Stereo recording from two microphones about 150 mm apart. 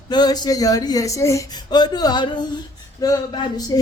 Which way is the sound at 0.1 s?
25° left (ahead or behind).